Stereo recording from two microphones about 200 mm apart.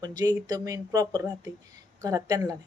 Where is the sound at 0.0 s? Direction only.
20° right (ahead or behind).